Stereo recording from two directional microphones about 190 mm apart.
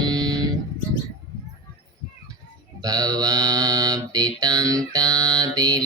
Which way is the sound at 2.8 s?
20° right (ahead or behind).